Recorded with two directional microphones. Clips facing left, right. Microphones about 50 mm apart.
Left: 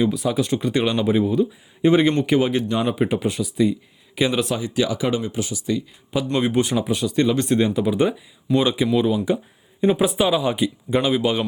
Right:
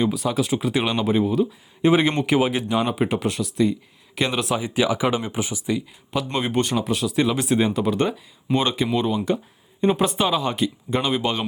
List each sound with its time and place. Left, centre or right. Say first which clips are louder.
0.0 s speech: left 1 dB; centre
4.5 s speech: right 1 dB; centre
6.3 s speech: left 3 dB; centre
7.7 s speech: left 2 dB; centre
8.5 s speech: left 2 dB; right
9.0 s speech: left 2 dB; centre